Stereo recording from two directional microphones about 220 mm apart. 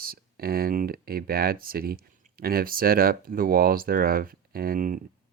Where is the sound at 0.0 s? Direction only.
45° right (ahead or behind).